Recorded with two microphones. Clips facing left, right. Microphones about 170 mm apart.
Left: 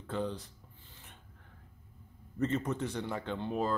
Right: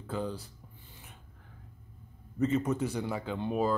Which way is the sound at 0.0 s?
5° right (ahead or behind).